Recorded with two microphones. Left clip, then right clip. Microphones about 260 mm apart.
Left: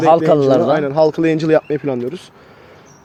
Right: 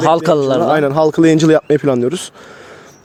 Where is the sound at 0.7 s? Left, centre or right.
Right.